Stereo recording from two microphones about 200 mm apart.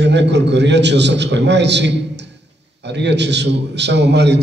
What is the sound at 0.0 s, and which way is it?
A man's voice, 60° right (ahead or behind).